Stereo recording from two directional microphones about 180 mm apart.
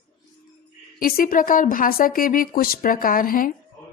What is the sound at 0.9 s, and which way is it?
A woman's voice, 55° left (ahead or behind).